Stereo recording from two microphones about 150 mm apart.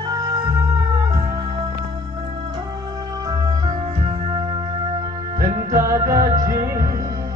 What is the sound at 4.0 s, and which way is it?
Music, 40° right (ahead or behind).